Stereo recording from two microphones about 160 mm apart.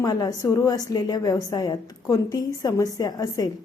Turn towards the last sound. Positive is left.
turn(degrees=25)  # may be behind; listen again after turning